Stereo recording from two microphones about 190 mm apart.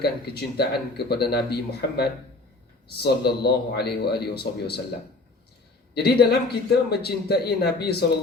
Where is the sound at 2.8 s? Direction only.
55° left (ahead or behind).